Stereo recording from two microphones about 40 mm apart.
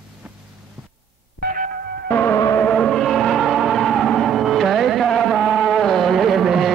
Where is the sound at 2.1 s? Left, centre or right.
Left.